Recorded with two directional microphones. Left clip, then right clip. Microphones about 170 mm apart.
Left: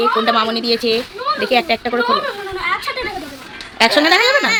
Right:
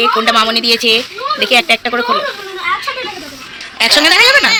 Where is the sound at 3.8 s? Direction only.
10° left (ahead or behind).